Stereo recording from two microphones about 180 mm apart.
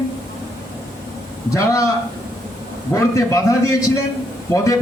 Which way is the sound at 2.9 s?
20° left (ahead or behind).